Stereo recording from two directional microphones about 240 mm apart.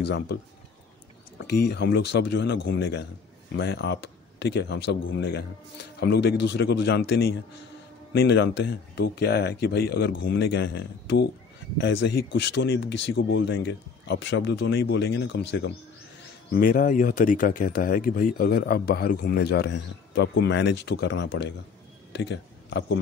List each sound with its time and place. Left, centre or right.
0.0 s speech: left
1.5 s speech: left
16.5 s speech: left